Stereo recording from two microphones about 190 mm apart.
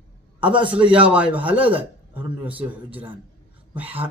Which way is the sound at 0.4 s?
25° right (ahead or behind).